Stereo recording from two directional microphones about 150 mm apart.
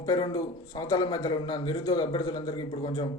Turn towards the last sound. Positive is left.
turn(degrees=30)  # may be behind; listen again after turning